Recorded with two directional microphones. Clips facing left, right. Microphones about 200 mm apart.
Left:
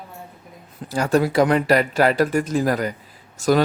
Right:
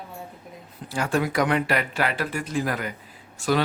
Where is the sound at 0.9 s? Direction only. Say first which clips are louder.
Left 6 dB; 40° left (ahead or behind).